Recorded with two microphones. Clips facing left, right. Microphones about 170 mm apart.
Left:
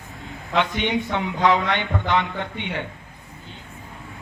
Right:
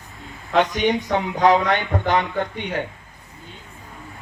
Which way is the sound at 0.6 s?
40° right (ahead or behind).